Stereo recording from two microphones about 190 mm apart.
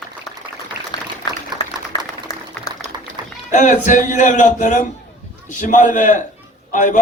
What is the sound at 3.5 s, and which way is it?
A man's voice, 40° left (ahead or behind).